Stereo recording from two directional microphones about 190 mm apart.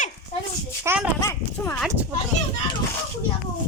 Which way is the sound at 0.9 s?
10° right (ahead or behind).